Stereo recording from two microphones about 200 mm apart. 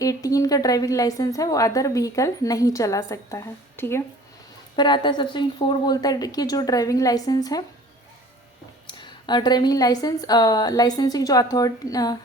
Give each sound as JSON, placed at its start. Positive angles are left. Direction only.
{"t": 0.0, "sound": "a woman's voice", "side_deg": 15}
{"t": 4.8, "sound": "speech", "side_deg": 25}
{"t": 8.9, "sound": "speech", "side_deg": 20}